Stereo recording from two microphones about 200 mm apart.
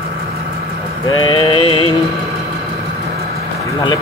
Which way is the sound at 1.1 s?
20° left (ahead or behind).